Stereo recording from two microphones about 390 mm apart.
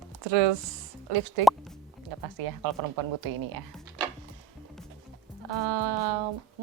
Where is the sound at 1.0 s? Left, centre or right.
Right.